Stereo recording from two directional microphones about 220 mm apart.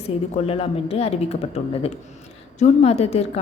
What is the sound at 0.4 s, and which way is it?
A woman's voice, 25° left (ahead or behind).